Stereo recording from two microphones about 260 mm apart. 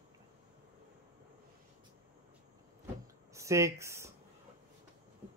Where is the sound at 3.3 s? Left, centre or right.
Centre.